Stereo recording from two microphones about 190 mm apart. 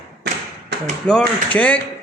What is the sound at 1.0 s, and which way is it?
Speech, 5° left (ahead or behind).